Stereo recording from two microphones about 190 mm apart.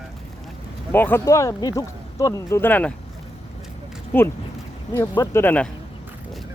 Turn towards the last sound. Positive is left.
turn(degrees=10)  # may be behind; listen again after turning